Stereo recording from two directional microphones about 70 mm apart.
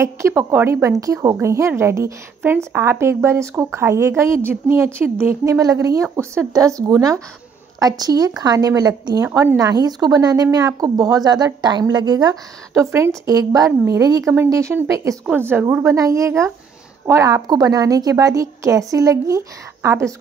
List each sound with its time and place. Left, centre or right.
0.0 s a woman's voice: right
5.4 s a woman's voice: right
12.7 s a woman's voice: right
13.3 s a woman's voice: right
14.5 s a woman's voice: right
15.3 s speech: right
15.8 s a woman's voice: right
17.5 s a woman's voice: right